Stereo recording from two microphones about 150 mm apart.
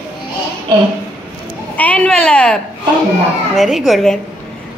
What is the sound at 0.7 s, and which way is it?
Speech, 30° right (ahead or behind).